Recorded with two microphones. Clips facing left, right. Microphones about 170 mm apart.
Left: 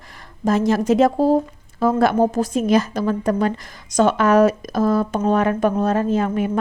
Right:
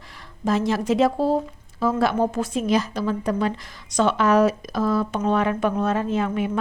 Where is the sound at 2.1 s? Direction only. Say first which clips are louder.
Left 5 dB; 40° left (ahead or behind).